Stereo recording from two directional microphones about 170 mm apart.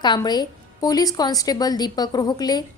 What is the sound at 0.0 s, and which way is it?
A woman's voice, 25° left (ahead or behind).